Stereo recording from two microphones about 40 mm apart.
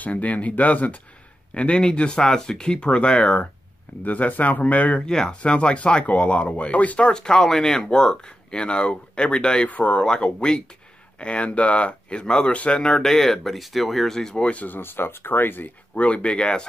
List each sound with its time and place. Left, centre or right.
0.0 s speech: left
1.5 s speech: left
4.0 s speech: left
5.0 s speech: centre
5.4 s speech: left
7.1 s speech: centre
9.7 s speech: left
10.0 s speech: left; by 14.1 s centre
14.1 s speech: centre
14.4 s speech: left
14.7 s speech: left
15.9 s speech: left